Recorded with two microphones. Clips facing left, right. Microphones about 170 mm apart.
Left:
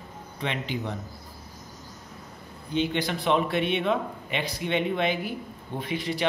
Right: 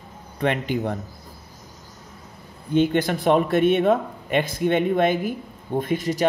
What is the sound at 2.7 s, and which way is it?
Speech, 50° right (ahead or behind).